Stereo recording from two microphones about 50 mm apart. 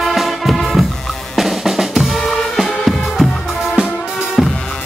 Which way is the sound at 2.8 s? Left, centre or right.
Centre.